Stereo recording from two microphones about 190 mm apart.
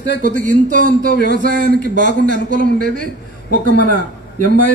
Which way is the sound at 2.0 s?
70° left (ahead or behind).